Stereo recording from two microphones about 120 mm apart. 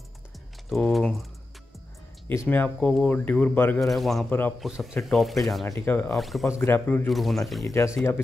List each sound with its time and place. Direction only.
0.7 s speech: centre (ahead or behind)
2.2 s speech: 15° left (ahead or behind)
3.8 s speech: centre (ahead or behind)
4.3 s speech: 15° left (ahead or behind)
4.6 s speech: 5° right (ahead or behind)
5.7 s speech: 20° left (ahead or behind)
6.1 s speech: centre (ahead or behind)
6.6 s speech: 15° left (ahead or behind)
7.1 s speech: centre (ahead or behind)
7.6 s speech: 25° left (ahead or behind)